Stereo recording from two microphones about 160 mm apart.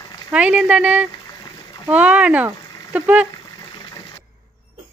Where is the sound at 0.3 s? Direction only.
5° right (ahead or behind).